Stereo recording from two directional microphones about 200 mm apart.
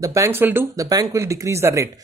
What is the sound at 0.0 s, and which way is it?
Speech, 15° right (ahead or behind).